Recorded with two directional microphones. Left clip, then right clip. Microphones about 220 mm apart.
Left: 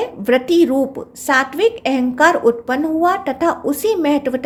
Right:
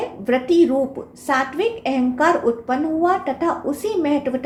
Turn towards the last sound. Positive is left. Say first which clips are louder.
# left 4 dB
turn(degrees=50)  # may be behind; listen again after turning